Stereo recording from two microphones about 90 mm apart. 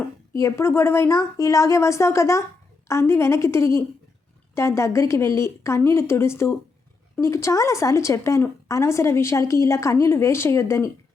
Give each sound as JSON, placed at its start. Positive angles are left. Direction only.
{"t": 0.3, "sound": "a woman's voice", "side_deg": 30}